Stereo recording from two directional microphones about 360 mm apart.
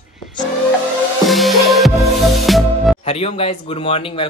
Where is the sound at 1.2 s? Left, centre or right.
Centre.